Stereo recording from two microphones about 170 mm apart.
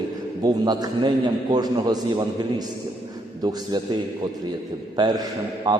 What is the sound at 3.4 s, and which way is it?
A man's voice, 25° right (ahead or behind).